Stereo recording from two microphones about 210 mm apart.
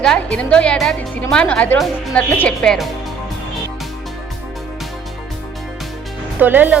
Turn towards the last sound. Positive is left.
turn(degrees=-10)  # may be behind; listen again after turning